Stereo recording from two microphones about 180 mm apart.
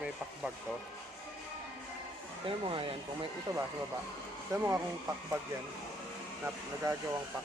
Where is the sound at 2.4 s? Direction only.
30° right (ahead or behind).